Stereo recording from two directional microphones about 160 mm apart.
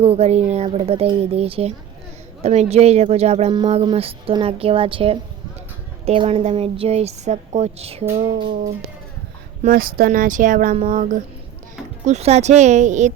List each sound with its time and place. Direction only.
0.0 s speech: 40° right (ahead or behind)
8.0 s female singing: 15° right (ahead or behind)
8.3 s speech: 30° right (ahead or behind)
9.6 s speech: 65° right (ahead or behind)
12.0 s speech: 45° right (ahead or behind)